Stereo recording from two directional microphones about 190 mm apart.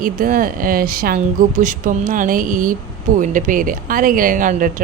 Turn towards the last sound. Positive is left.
turn(degrees=-45)  # may be behind; listen again after turning